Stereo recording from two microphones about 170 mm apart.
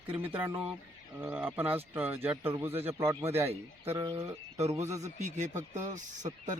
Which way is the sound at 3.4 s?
35° right (ahead or behind).